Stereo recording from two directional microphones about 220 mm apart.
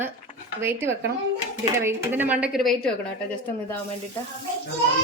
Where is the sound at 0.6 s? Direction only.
10° right (ahead or behind).